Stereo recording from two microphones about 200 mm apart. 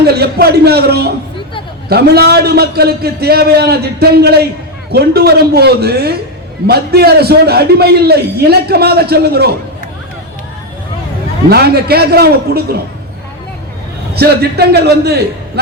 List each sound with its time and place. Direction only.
0.0 s a man's voice: 55° right (ahead or behind)
11.4 s a man's voice: 50° right (ahead or behind)
14.1 s a man's voice: 55° right (ahead or behind)